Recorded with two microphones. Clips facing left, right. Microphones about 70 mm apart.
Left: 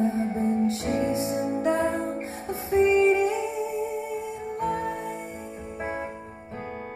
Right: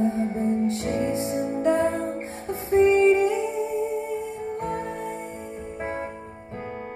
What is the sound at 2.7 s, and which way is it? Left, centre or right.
Music, right.